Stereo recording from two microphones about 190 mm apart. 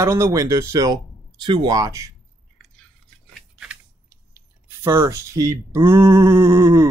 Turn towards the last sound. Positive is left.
turn(degrees=-15)  # may be behind; listen again after turning